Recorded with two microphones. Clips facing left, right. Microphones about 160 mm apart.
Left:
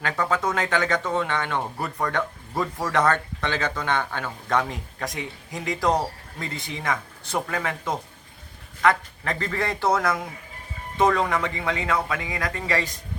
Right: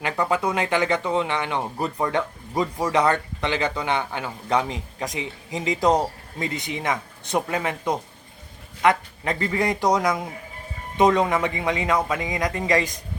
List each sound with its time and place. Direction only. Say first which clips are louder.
0.0 s a man's voice: right 2 dB; 15° right (ahead or behind)